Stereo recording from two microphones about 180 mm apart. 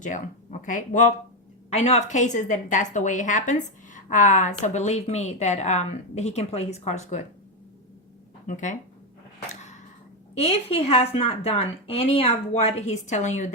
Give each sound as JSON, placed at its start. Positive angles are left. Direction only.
{"t": 0.6, "sound": "a woman's voice", "side_deg": 45}
{"t": 10.4, "sound": "a woman's voice", "side_deg": 35}